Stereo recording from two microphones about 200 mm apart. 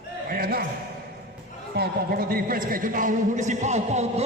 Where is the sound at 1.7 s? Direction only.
50° right (ahead or behind).